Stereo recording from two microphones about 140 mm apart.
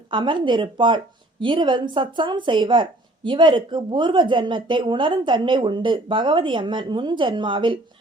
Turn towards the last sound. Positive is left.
turn(degrees=-35)  # may be behind; listen again after turning